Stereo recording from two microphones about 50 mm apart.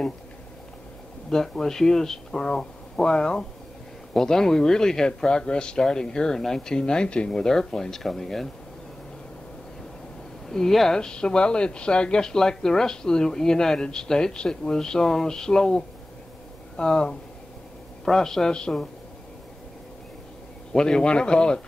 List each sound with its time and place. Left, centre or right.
1.3 s speech: centre
10.5 s speech: centre
20.7 s a man's voice: centre